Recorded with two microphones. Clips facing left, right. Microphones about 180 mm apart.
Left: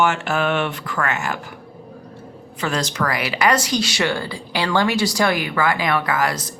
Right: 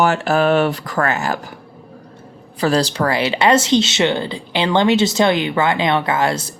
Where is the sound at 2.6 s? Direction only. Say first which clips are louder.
Right 6 dB; 35° right (ahead or behind).